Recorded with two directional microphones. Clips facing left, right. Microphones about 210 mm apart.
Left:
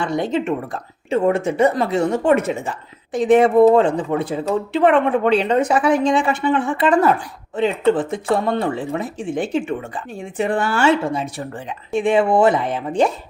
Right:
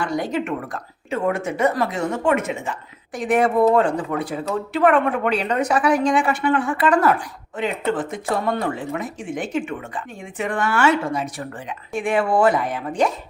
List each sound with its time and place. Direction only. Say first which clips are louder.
0.0 s speech: left 3 dB; 25° left (ahead or behind)